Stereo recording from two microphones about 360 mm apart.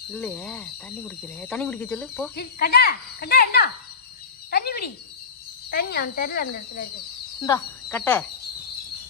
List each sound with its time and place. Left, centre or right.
0.1 s speech: centre
2.3 s speech: left
7.4 s speech: centre